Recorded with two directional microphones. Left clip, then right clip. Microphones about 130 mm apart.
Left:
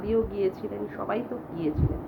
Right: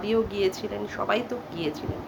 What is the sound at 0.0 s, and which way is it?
A woman's voice, 20° right (ahead or behind).